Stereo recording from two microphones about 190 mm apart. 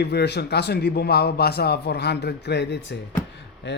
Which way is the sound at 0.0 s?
60° left (ahead or behind).